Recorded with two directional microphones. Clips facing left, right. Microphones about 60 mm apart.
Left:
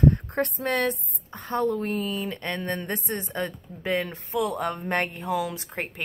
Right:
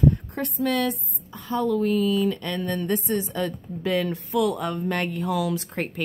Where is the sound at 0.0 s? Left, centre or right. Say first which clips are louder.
Left 1 dB; left.